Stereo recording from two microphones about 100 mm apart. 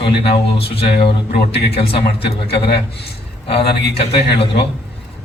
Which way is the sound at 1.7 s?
75° left (ahead or behind).